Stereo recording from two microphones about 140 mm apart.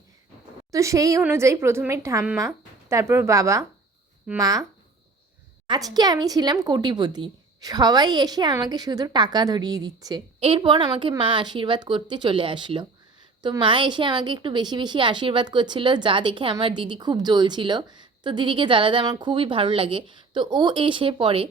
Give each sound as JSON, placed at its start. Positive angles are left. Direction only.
{"t": 0.7, "sound": "speech", "side_deg": -25}
{"t": 5.6, "sound": "a woman's voice", "side_deg": -30}